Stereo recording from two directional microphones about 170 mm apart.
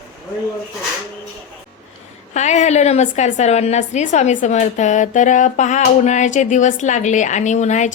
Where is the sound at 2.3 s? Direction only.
45° left (ahead or behind).